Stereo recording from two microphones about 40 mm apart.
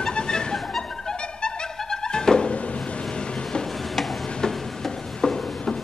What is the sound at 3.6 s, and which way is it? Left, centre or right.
Tick-tock, centre.